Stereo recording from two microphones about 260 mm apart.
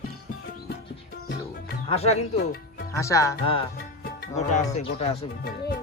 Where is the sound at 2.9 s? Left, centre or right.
Centre.